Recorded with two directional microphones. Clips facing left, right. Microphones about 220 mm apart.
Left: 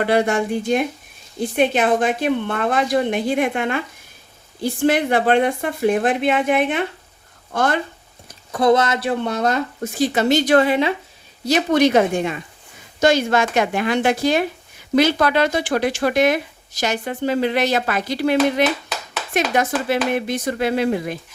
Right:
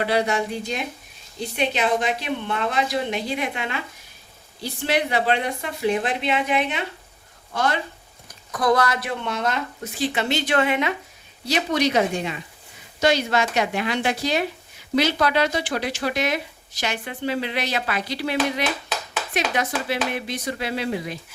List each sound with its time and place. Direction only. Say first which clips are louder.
0.0 s speech: left 4 dB; 50° left (ahead or behind)
8.5 s speech: left 5 dB; 25° left (ahead or behind)
11.4 s speech: left 6 dB; 50° left (ahead or behind)